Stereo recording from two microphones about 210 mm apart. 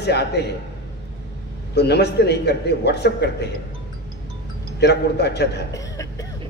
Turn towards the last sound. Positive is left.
turn(degrees=15)  # may be behind; listen again after turning